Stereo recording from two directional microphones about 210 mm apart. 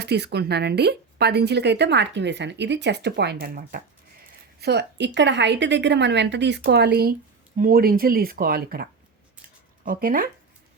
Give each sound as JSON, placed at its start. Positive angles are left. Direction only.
{"t": 0.0, "sound": "a woman's voice", "side_deg": -50}